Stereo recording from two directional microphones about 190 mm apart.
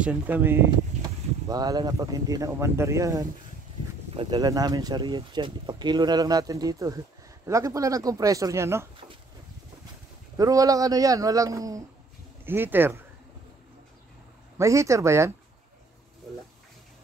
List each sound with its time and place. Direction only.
0.0 s speech: 10° right (ahead or behind)
10.3 s speech: 20° right (ahead or behind)
14.6 s speech: 15° right (ahead or behind)